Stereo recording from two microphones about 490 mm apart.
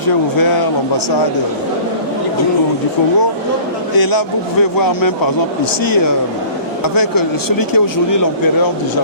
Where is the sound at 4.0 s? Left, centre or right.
Left.